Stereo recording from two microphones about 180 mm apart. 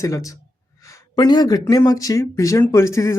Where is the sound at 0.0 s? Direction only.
20° left (ahead or behind).